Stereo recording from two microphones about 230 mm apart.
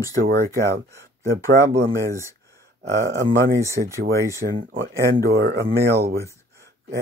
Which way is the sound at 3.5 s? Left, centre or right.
Centre.